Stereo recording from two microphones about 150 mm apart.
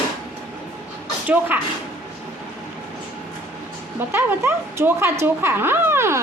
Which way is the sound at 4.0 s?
15° right (ahead or behind).